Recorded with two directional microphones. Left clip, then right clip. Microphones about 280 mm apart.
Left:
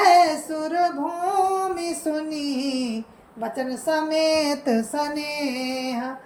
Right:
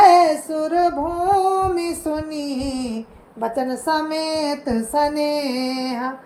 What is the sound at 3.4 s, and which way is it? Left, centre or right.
Female singing, centre.